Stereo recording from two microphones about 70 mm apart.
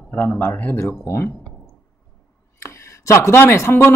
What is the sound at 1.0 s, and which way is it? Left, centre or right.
Speech, left.